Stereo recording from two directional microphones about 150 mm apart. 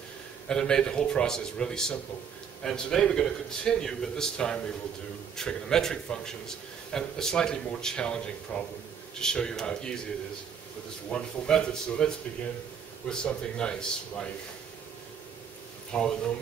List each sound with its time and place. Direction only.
0.5 s a man's voice: 5° left (ahead or behind)
11.1 s a man's voice: 5° left (ahead or behind)
13.1 s a man's voice: 5° left (ahead or behind)
15.9 s a man's voice: 5° left (ahead or behind)